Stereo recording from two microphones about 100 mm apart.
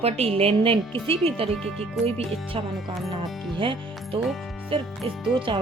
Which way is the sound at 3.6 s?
60° right (ahead or behind).